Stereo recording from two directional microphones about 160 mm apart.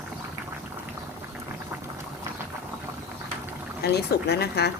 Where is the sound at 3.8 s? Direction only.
90° left.